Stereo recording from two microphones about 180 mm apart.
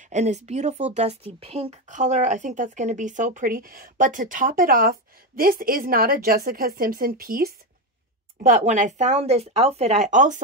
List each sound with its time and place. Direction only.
0.0 s a woman's voice: 40° right (ahead or behind)